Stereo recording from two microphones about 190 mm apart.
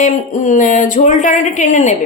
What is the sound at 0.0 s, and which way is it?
A woman's voice, 40° left (ahead or behind).